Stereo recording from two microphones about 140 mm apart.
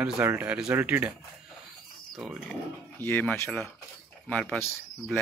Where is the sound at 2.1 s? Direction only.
Centre (ahead or behind).